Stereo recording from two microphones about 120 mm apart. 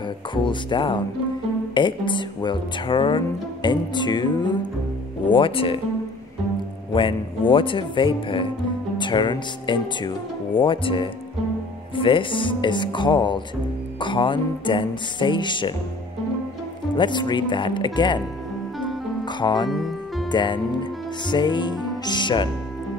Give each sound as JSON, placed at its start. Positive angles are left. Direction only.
{"t": 0.3, "sound": "speech", "side_deg": 40}
{"t": 5.3, "sound": "speech", "side_deg": 45}
{"t": 6.9, "sound": "speech", "side_deg": 45}
{"t": 16.9, "sound": "speech", "side_deg": 40}
{"t": 19.2, "sound": "speech", "side_deg": 40}
{"t": 19.7, "sound": "music", "side_deg": 0}
{"t": 20.2, "sound": "speech", "side_deg": 40}